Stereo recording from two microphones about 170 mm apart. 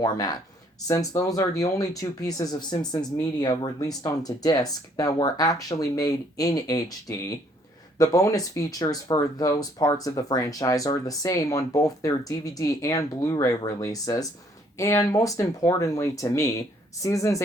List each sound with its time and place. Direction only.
0.0 s speech: 25° left (ahead or behind)